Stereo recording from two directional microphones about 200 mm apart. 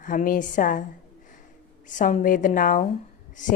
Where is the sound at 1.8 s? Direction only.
40° left (ahead or behind).